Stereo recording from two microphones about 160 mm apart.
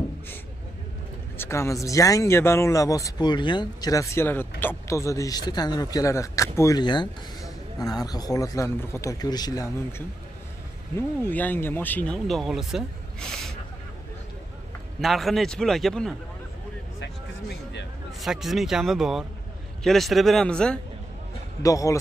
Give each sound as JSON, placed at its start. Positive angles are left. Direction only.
{"t": 1.4, "sound": "speech", "side_deg": 15}
{"t": 15.0, "sound": "a man's voice", "side_deg": 0}
{"t": 17.0, "sound": "a sound", "side_deg": 90}
{"t": 18.2, "sound": "a man's voice", "side_deg": 0}
{"t": 21.6, "sound": "speech", "side_deg": 20}